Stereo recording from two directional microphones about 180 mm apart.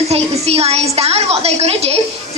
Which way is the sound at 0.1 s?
35° right (ahead or behind).